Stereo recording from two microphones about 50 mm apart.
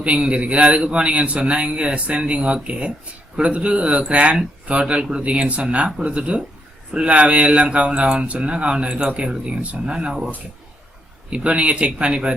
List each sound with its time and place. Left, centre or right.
0.0 s speech: right
11.3 s speech: right